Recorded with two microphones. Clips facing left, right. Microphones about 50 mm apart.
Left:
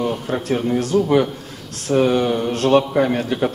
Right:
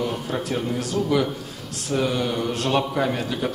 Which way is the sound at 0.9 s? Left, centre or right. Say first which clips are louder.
Left 8 dB; centre.